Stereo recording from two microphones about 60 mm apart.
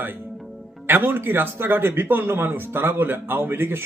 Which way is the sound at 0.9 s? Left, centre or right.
Right.